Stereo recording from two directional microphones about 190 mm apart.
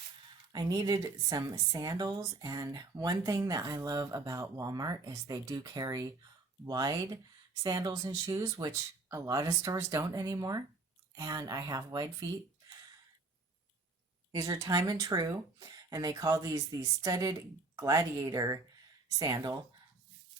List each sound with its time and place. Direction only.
0.5 s a woman's voice: 20° right (ahead or behind)
14.3 s a woman's voice: 15° right (ahead or behind)